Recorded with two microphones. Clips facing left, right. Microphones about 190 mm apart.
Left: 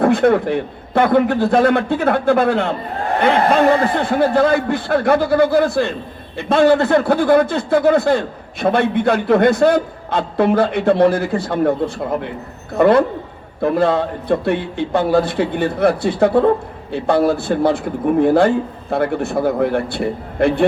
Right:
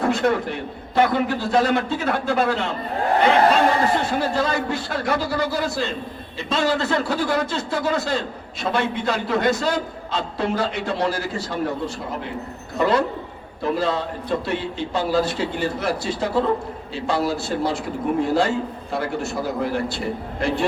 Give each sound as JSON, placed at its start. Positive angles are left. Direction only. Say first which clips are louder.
{"t": 0.0, "sound": "a man's voice", "louder": "left 7 dB", "side_deg": 55}